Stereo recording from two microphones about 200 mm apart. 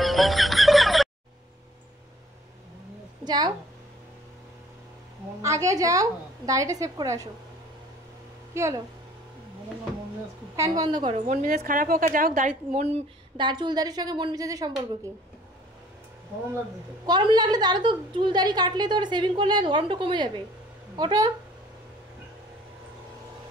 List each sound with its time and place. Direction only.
0.0 s music: centre (ahead or behind)
3.3 s a woman's voice: 20° right (ahead or behind)
5.4 s a woman's voice: 15° right (ahead or behind)
8.5 s a woman's voice: 15° right (ahead or behind)
10.8 s a woman's voice: 20° right (ahead or behind)
11.2 s a woman's voice: 45° right (ahead or behind)
13.4 s a woman's voice: 20° right (ahead or behind)
17.0 s a woman's voice: 20° right (ahead or behind)